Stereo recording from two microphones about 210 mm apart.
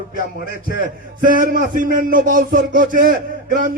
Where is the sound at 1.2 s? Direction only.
40° right (ahead or behind).